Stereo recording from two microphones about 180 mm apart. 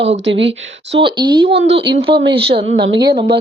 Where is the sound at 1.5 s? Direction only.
85° right.